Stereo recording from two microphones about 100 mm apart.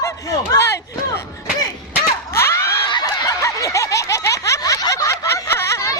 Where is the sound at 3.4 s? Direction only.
30° left (ahead or behind).